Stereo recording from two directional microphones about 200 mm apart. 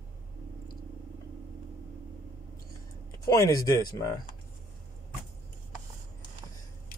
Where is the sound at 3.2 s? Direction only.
20° left (ahead or behind).